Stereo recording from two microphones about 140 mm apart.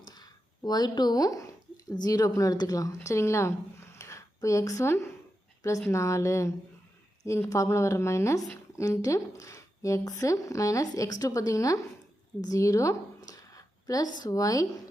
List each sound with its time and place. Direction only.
0.1 s speech: 30° left (ahead or behind)